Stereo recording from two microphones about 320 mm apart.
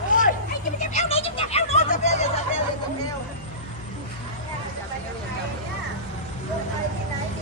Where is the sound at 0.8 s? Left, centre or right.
Centre.